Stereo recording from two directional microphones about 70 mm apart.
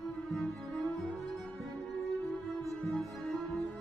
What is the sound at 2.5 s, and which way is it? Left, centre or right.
Music, centre.